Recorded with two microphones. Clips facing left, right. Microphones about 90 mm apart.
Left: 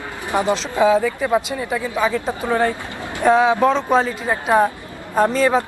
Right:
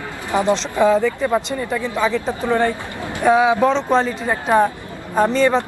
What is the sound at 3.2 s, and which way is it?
Speech, 5° right (ahead or behind).